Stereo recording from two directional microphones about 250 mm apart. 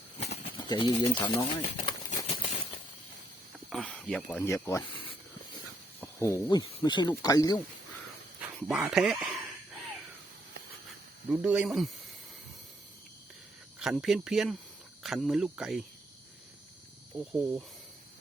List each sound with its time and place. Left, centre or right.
0.2 s bird: left
3.7 s speech: centre
8.4 s speech: centre
11.3 s speech: centre
13.7 s speech: centre